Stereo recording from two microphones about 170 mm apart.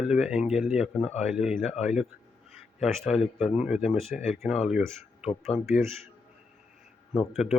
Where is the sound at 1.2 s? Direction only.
5° right (ahead or behind).